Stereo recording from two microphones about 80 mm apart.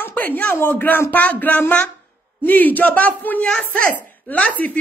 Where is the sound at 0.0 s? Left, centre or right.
Left.